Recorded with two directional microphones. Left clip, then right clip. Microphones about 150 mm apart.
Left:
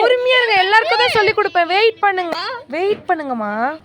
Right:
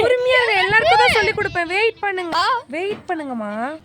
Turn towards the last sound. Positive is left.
turn(degrees=5)  # may be behind; listen again after turning